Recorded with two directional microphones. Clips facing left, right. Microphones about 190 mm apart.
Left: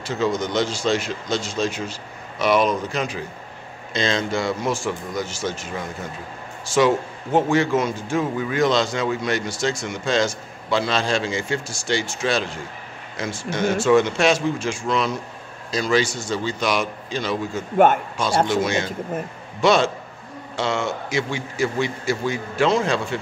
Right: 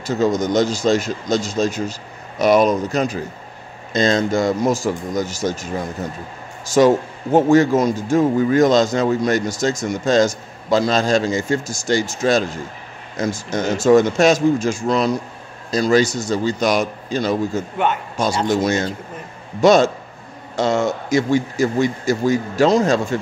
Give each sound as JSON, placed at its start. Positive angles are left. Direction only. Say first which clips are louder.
{"t": 0.0, "sound": "a man's voice", "louder": "right 5 dB", "side_deg": -40}